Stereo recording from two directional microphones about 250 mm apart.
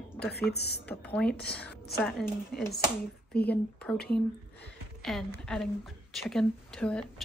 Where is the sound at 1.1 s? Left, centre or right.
Centre.